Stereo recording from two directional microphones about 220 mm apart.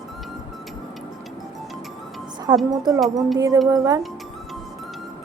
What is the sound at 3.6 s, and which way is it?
Speech, 15° right (ahead or behind).